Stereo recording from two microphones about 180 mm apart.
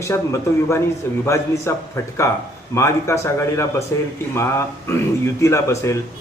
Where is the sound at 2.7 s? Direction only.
15° left (ahead or behind).